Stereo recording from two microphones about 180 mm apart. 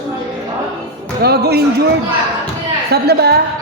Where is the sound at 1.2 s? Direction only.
60° right (ahead or behind).